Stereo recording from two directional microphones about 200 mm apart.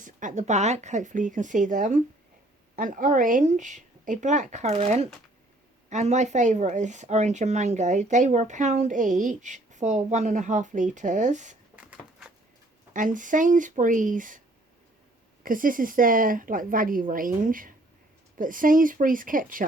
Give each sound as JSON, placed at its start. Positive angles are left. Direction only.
{"t": 0.0, "sound": "speech", "side_deg": -40}
{"t": 11.8, "sound": "a sound", "side_deg": -5}
{"t": 12.9, "sound": "speech", "side_deg": -40}
{"t": 15.4, "sound": "a woman's voice", "side_deg": -45}